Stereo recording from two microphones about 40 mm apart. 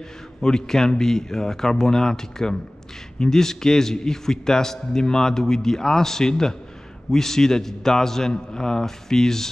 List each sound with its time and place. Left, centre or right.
0.4 s a man's voice: centre